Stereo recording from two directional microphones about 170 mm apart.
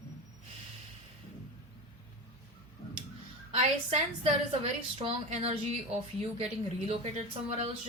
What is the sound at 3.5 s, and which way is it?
A woman's voice, 35° right (ahead or behind).